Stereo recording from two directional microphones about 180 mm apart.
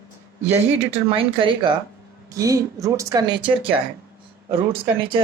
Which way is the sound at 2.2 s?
20° right (ahead or behind).